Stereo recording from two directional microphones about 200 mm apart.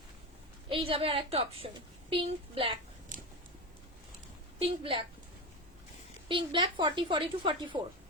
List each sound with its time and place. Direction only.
0.7 s a woman's voice: 30° right (ahead or behind)
4.6 s a woman's voice: 25° right (ahead or behind)
6.2 s a woman's voice: 25° right (ahead or behind)